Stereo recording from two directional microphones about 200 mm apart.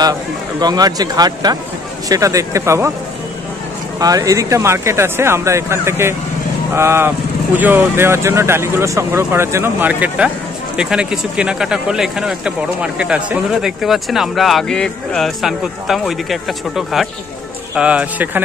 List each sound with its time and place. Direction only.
0.6 s a man's voice: 20° right (ahead or behind)
4.0 s a man's voice: 15° right (ahead or behind)